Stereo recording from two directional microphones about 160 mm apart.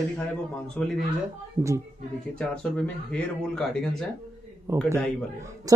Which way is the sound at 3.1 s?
5° left (ahead or behind).